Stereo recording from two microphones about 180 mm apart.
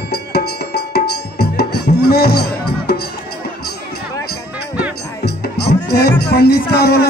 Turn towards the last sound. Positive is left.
turn(degrees=60)  # may be behind; listen again after turning